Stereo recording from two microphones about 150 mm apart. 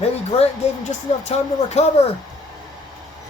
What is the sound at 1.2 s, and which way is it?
Speech, 45° left (ahead or behind).